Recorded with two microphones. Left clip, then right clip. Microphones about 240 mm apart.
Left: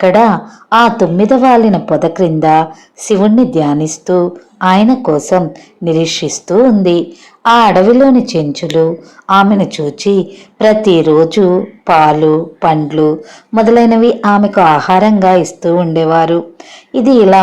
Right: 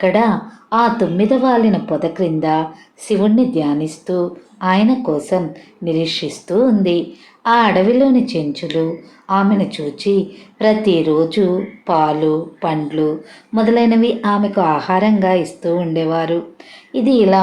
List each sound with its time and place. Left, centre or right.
0.0 s speech: left